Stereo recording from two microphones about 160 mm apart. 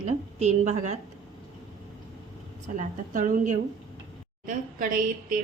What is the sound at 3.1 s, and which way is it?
A woman's voice, 55° right (ahead or behind).